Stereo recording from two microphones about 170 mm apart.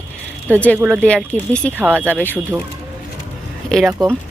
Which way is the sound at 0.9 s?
5° left (ahead or behind).